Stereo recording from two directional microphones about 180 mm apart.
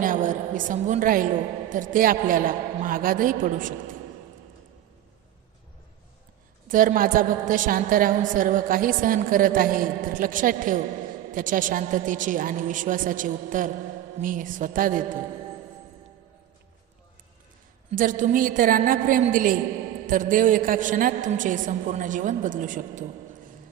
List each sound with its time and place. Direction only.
0.0 s a woman's voice: 45° right (ahead or behind)
6.7 s a woman's voice: 50° right (ahead or behind)
17.9 s a woman's voice: 45° right (ahead or behind)